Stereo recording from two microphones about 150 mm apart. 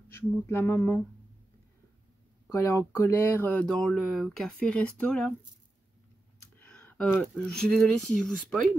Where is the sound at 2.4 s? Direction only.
20° left (ahead or behind).